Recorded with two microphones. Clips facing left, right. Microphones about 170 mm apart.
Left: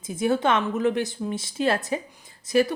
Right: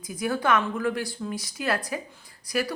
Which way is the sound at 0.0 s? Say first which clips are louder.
Left 4 dB; 25° left (ahead or behind).